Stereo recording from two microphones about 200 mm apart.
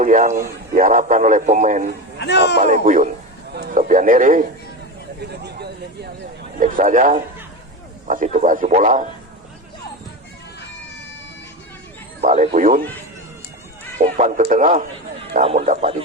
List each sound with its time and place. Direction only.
0.0 s a man's voice: 40° right (ahead or behind)
2.1 s speech: 60° left (ahead or behind)
2.6 s a man's voice: 40° right (ahead or behind)
5.3 s speech: 55° right (ahead or behind)
6.6 s a man's voice: 40° right (ahead or behind)
12.2 s speech: 30° right (ahead or behind)
14.0 s a man's voice: 35° right (ahead or behind)